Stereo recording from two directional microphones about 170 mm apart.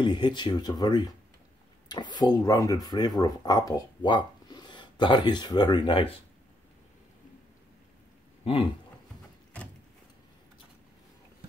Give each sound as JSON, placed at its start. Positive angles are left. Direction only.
{"t": 0.0, "sound": "speech", "side_deg": 25}